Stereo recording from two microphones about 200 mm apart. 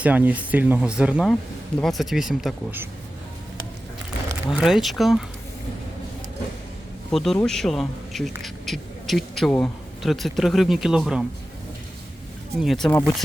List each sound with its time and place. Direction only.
0.0 s speech: 10° right (ahead or behind)
4.3 s speech: 5° right (ahead or behind)
7.1 s speech: centre (ahead or behind)
12.5 s speech: centre (ahead or behind)